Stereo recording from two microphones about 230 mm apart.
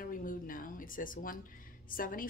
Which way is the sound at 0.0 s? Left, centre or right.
Left.